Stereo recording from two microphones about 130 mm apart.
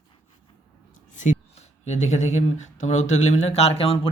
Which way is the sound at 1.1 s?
70° left (ahead or behind).